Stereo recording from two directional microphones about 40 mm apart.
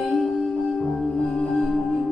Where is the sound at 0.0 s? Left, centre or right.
Centre.